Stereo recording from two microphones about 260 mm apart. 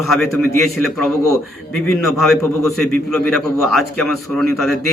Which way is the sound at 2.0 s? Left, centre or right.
Centre.